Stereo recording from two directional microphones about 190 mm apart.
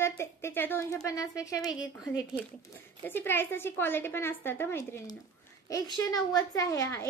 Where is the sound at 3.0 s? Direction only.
10° left (ahead or behind).